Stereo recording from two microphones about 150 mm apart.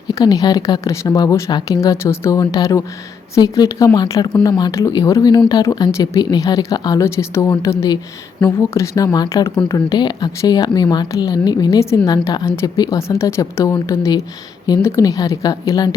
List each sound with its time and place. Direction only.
0.1 s speech: 25° left (ahead or behind)